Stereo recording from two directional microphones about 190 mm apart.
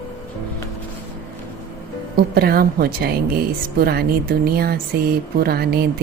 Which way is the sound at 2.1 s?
55° right (ahead or behind).